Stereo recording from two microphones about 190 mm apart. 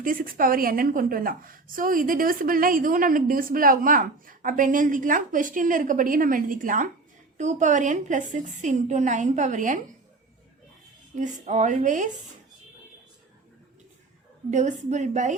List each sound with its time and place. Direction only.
0.0 s a woman's voice: 45° right (ahead or behind)
11.2 s a woman's voice: 40° right (ahead or behind)
14.5 s a woman's voice: 40° right (ahead or behind)